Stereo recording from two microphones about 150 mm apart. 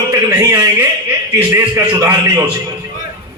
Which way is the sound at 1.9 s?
20° right (ahead or behind).